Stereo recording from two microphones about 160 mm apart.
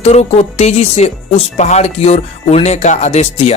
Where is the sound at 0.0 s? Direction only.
45° left (ahead or behind).